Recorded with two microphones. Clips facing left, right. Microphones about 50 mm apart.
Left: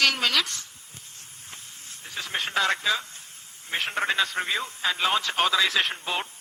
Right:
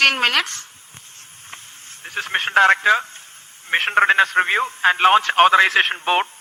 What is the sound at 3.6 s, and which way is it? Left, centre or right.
A man's voice, right.